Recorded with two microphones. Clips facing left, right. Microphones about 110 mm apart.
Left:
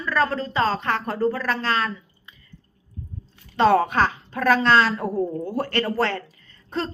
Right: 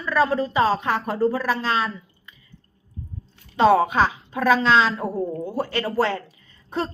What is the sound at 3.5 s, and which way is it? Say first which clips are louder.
A woman's voice: right 1 dB; 5° right (ahead or behind).